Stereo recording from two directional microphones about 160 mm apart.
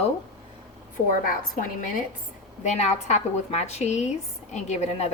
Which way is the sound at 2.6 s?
45° left (ahead or behind).